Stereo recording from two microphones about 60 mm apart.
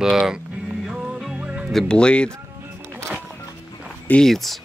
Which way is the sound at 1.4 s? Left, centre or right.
Right.